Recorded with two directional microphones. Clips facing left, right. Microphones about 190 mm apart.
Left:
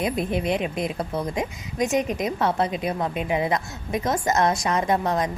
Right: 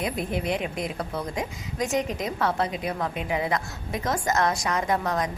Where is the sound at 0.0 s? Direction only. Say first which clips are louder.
Left 4 dB; 20° left (ahead or behind).